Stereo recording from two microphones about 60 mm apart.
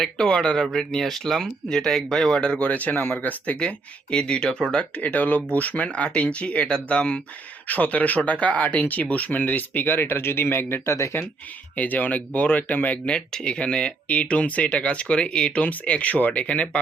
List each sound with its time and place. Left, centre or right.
0.0 s speech: centre; by 11.3 s left
11.8 s speech: left